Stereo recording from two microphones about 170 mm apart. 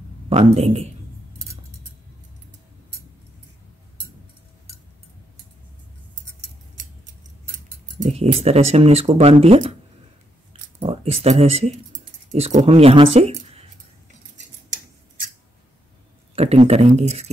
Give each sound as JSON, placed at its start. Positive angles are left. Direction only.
{"t": 0.3, "sound": "speech", "side_deg": -40}
{"t": 8.0, "sound": "speech", "side_deg": -40}
{"t": 10.8, "sound": "speech", "side_deg": -35}
{"t": 16.3, "sound": "speech", "side_deg": -40}